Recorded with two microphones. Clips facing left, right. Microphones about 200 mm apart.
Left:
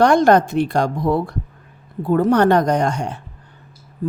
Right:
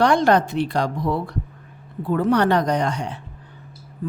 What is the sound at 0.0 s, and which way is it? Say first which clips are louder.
A woman's voice: left 4 dB; 45° left (ahead or behind).